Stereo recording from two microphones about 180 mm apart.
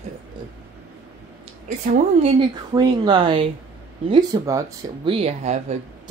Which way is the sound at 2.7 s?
20° right (ahead or behind).